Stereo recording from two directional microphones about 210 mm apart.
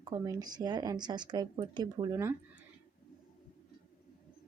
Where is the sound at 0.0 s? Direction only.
20° right (ahead or behind).